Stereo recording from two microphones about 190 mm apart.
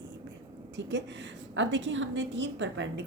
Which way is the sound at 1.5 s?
75° right (ahead or behind).